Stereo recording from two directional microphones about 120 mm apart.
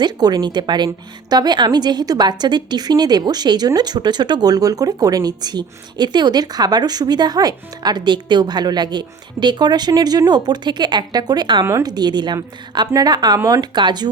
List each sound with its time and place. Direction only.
0.0 s speech: 35° right (ahead or behind)